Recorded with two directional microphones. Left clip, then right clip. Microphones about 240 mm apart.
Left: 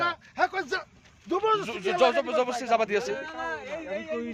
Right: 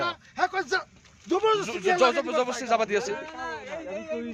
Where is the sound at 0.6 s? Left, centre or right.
Centre.